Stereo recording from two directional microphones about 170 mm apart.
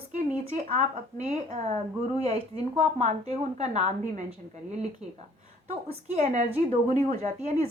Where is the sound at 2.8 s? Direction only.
40° right (ahead or behind).